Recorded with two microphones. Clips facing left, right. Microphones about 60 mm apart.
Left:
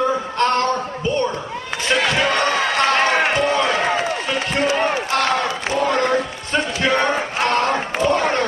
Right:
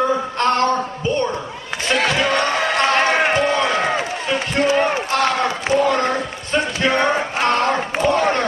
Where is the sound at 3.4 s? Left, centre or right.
Right.